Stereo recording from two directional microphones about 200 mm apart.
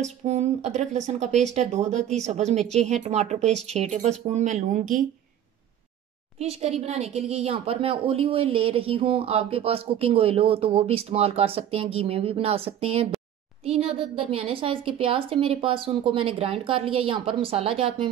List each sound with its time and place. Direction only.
0.0 s speech: 35° right (ahead or behind)
6.3 s speech: 30° right (ahead or behind)